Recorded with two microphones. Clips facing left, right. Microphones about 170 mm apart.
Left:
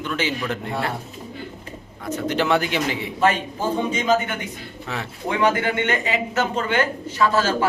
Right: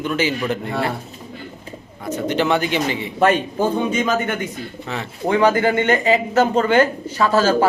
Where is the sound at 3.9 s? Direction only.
55° right (ahead or behind).